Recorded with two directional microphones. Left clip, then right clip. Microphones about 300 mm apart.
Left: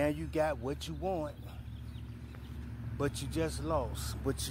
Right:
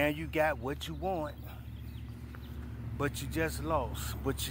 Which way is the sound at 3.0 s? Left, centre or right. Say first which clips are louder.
Right 1 dB; centre.